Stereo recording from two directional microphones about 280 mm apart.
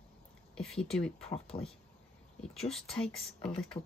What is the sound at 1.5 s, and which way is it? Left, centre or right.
Speech, centre.